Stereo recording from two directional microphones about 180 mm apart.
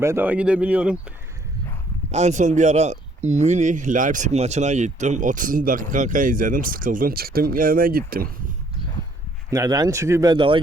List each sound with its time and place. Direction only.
0.0 s speech: 10° right (ahead or behind)
2.0 s speech: 40° right (ahead or behind); by 8.3 s 55° right (ahead or behind)
9.5 s speech: 20° right (ahead or behind)